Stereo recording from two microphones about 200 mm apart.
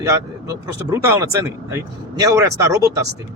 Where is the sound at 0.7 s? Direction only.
15° right (ahead or behind).